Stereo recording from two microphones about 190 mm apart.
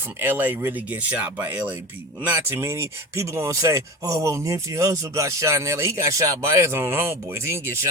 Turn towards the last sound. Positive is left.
turn(degrees=-15)  # may be behind; listen again after turning